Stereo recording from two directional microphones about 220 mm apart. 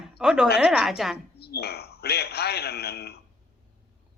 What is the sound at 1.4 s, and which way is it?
Speech, 45° left (ahead or behind).